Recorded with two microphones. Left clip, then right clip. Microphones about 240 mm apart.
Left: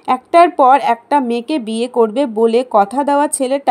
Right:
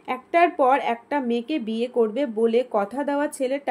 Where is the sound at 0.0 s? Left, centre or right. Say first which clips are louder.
Left 10 dB; left.